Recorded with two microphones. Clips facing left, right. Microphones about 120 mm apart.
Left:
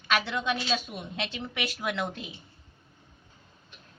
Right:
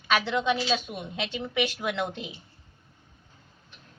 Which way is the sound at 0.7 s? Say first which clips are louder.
Right 2 dB; centre (ahead or behind).